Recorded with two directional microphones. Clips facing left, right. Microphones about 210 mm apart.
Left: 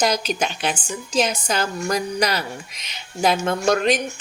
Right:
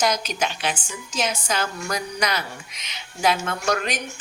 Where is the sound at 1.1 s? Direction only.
35° left (ahead or behind).